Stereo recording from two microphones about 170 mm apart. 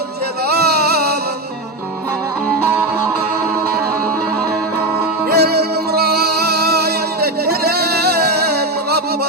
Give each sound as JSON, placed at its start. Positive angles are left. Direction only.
{"t": 0.4, "sound": "music", "side_deg": -70}
{"t": 5.3, "sound": "music", "side_deg": -70}